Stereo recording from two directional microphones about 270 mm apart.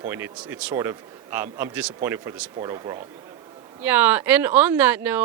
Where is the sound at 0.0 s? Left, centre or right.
Centre.